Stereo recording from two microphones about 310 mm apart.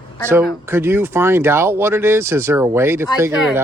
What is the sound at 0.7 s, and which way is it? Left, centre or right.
Speech, centre.